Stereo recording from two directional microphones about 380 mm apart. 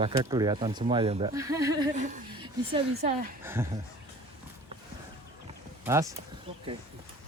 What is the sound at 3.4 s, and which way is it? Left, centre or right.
Speech, centre.